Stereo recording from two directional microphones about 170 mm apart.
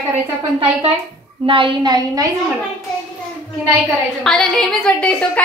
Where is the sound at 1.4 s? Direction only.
30° right (ahead or behind).